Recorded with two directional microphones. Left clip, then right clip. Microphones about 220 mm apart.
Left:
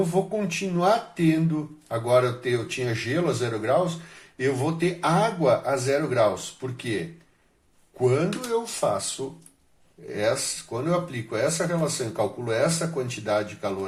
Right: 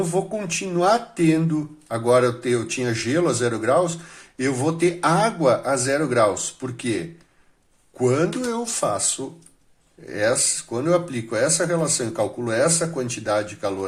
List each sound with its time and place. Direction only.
0.1 s speech: 45° right (ahead or behind)
10.2 s speech: 45° right (ahead or behind)